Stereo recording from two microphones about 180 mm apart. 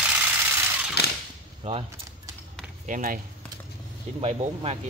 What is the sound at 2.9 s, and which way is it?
Speech, 50° right (ahead or behind).